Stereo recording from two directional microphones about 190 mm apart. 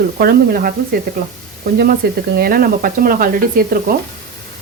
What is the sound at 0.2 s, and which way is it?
Speech, 50° right (ahead or behind).